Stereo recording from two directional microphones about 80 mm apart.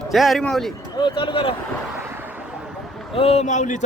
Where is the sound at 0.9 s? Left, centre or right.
Left.